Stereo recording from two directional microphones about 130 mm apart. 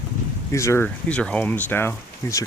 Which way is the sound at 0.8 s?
10° left (ahead or behind).